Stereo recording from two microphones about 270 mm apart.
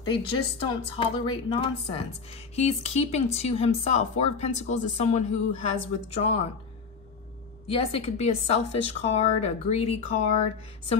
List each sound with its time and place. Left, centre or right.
0.0 s speech: centre
7.6 s speech: left